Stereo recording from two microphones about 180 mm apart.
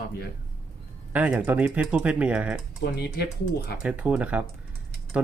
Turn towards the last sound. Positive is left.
turn(degrees=-5)  # may be behind; listen again after turning